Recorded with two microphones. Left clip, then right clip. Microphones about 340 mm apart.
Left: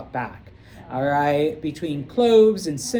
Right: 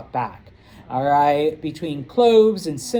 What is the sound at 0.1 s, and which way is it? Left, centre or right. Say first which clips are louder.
Speech: right 5 dB; right.